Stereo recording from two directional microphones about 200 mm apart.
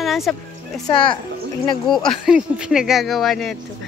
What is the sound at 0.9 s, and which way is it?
Speech, 25° left (ahead or behind).